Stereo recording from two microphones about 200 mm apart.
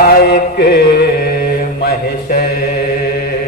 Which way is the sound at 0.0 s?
50° left (ahead or behind).